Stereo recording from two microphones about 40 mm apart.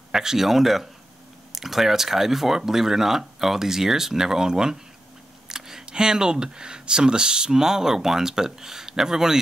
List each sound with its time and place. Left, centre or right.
0.1 s speech: centre
5.5 s a sound: centre
5.9 s speech: centre